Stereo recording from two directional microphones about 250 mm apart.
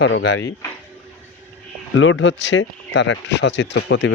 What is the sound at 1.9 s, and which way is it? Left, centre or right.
Speech, left.